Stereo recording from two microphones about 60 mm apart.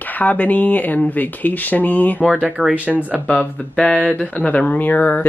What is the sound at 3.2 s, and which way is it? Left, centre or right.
Speech, left.